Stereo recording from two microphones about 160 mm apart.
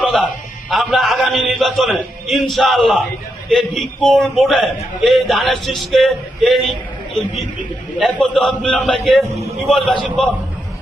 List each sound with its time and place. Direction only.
0.0 s a sound: 5° left (ahead or behind)
0.7 s a man's voice: centre (ahead or behind)
9.2 s a man's voice: 20° right (ahead or behind)
9.6 s a man's voice: centre (ahead or behind)